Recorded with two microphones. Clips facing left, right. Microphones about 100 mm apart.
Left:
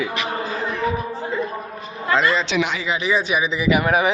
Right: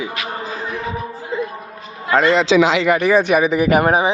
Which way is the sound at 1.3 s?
20° right (ahead or behind).